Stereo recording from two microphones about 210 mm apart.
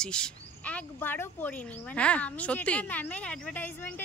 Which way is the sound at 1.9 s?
5° left (ahead or behind).